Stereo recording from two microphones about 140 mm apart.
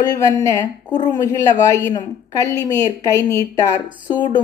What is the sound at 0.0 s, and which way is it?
A woman's voice, 20° left (ahead or behind).